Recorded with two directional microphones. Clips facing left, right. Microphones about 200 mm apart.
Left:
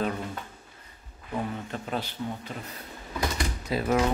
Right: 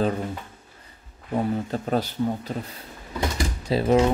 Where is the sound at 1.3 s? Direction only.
35° right (ahead or behind).